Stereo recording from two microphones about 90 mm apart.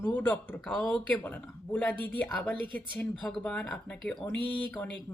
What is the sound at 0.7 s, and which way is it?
Speech, 10° left (ahead or behind).